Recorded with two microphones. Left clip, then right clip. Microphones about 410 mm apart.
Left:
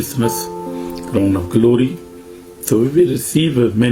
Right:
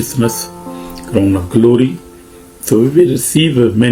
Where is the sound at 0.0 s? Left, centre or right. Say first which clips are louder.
Right 2 dB; left.